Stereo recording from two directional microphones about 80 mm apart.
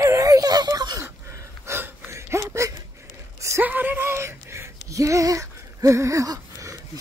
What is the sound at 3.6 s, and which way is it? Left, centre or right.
Speech, right.